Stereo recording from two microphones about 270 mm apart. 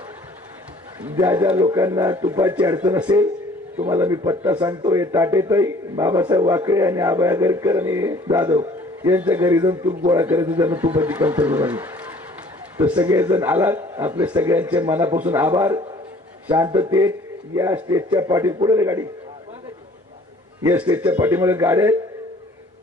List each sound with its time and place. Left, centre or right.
1.0 s a man's voice: centre
20.7 s a man's voice: centre